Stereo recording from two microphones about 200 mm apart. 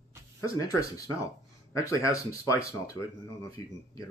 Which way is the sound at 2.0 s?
15° left (ahead or behind).